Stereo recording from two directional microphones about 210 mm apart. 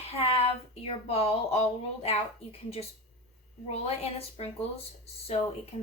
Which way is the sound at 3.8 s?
30° left (ahead or behind).